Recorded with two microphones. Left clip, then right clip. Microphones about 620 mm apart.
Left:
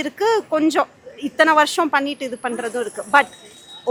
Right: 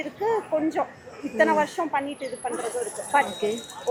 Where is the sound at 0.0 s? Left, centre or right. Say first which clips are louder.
Left 7 dB; left.